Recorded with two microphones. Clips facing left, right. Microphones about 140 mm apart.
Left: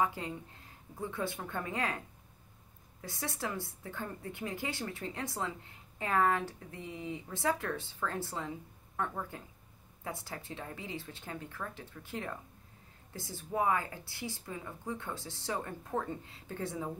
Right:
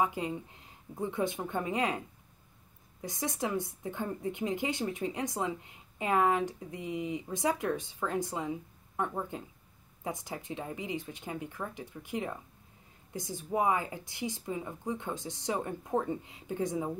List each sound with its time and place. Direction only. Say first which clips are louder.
0.0 s a woman's voice: right 2 dB; 20° right (ahead or behind)